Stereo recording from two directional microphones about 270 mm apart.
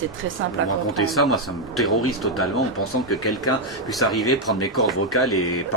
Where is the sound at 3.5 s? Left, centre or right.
Left.